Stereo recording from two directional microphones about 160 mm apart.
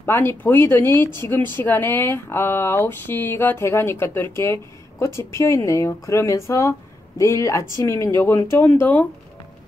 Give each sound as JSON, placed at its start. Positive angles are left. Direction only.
{"t": 0.0, "sound": "speech", "side_deg": 15}